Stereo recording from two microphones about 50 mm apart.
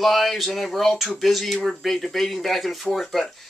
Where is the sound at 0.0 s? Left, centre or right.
Centre.